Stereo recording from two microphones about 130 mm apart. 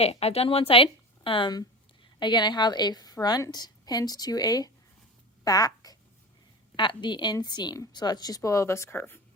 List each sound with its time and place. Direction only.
0.0 s a woman's voice: 50° left (ahead or behind); by 4.7 s 30° left (ahead or behind)
5.5 s a sound: 30° left (ahead or behind)
6.7 s a woman's voice: 35° left (ahead or behind); by 9.2 s 15° left (ahead or behind)